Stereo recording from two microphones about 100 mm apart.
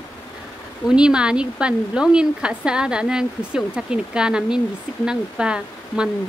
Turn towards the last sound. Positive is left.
turn(degrees=-10)  # may be behind; listen again after turning